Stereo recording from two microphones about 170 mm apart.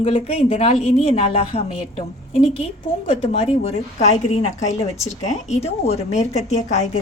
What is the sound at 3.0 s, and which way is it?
A woman's voice, 35° left (ahead or behind).